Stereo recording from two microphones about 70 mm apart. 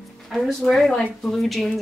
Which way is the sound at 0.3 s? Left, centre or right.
Centre.